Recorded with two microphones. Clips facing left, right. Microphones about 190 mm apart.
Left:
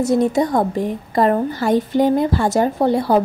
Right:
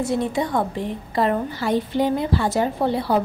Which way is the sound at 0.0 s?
40° left (ahead or behind).